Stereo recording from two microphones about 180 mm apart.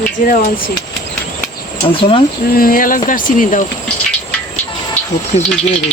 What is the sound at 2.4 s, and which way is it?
Speech, 55° left (ahead or behind).